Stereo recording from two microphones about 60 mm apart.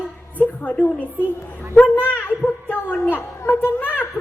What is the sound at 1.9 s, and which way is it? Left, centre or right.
A woman's voice, left.